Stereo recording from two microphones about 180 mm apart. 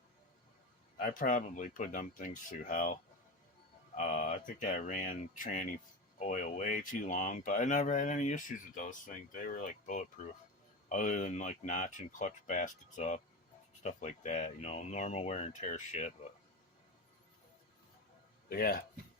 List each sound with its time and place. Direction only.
0.9 s speech: 50° left (ahead or behind)
18.4 s speech: 55° left (ahead or behind)